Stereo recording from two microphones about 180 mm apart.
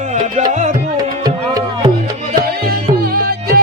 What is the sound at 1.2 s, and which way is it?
Music, 20° right (ahead or behind).